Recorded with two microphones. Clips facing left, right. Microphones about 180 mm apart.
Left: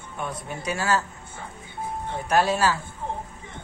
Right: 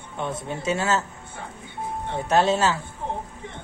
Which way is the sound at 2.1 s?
25° right (ahead or behind).